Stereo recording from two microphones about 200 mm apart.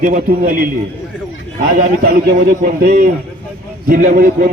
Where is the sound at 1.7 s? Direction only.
45° right (ahead or behind).